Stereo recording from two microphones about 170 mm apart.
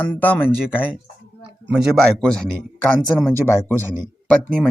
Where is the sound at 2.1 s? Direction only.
5° left (ahead or behind).